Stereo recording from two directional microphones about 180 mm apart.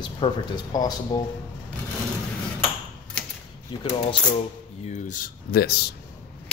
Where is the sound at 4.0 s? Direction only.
35° left (ahead or behind); by 5.9 s 60° left (ahead or behind).